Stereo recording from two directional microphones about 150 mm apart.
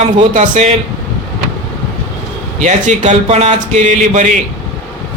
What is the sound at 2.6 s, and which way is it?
Speech, 50° right (ahead or behind).